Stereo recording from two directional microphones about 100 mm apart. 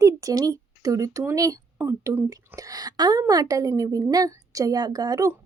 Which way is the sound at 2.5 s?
40° right (ahead or behind).